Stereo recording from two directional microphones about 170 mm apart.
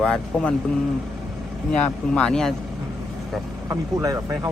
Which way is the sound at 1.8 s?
5° left (ahead or behind).